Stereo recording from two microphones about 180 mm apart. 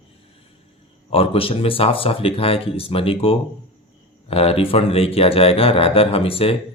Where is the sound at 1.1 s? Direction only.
30° left (ahead or behind).